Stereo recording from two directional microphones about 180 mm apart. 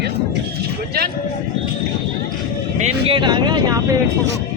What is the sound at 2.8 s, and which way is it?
Speech, 30° right (ahead or behind).